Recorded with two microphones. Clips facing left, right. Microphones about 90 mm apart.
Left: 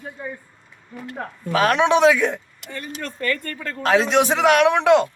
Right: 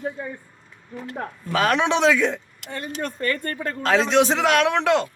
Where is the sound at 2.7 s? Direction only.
20° right (ahead or behind).